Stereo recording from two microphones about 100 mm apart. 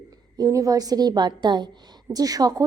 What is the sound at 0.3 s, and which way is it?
A woman's voice, 35° right (ahead or behind).